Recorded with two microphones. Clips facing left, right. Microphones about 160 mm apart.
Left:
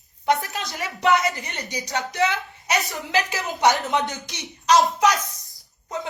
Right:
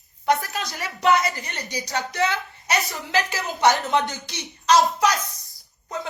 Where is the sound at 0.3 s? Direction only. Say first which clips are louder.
Even; 20° left (ahead or behind).